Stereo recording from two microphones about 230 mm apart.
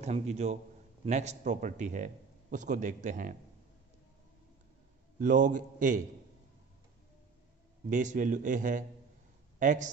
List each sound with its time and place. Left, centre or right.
0.0 s a man's voice: right
5.2 s a man's voice: right
7.9 s a man's voice: right